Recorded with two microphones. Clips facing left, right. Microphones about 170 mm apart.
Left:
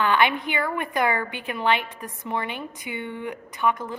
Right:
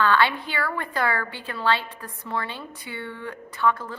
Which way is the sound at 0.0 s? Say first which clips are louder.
Even; 15° left (ahead or behind).